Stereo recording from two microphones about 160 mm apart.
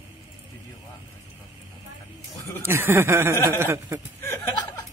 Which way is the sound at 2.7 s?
15° right (ahead or behind).